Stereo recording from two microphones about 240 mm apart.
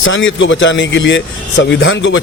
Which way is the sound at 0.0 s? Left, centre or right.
Left.